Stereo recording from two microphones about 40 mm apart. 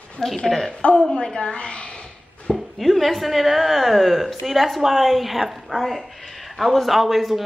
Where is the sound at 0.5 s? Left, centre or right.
Centre.